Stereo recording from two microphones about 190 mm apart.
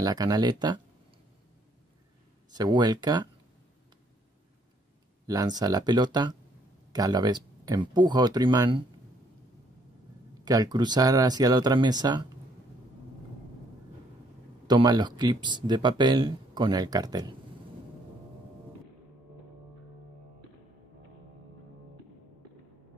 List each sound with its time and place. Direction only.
0.0 s speech: 20° right (ahead or behind)
2.5 s speech: 20° right (ahead or behind)
5.2 s speech: 20° right (ahead or behind)
10.4 s speech: 20° right (ahead or behind)
14.7 s speech: 20° right (ahead or behind)